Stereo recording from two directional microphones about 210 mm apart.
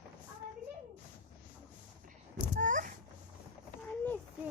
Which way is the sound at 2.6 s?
40° right (ahead or behind).